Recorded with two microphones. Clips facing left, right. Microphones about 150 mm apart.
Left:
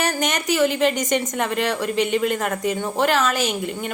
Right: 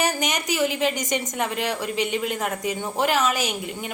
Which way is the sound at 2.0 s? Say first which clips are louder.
Left 6 dB; 55° left (ahead or behind).